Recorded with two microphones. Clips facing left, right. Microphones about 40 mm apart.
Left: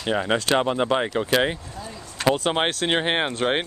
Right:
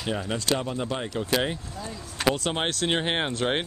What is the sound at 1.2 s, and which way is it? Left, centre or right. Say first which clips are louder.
Speech: left 5 dB; left.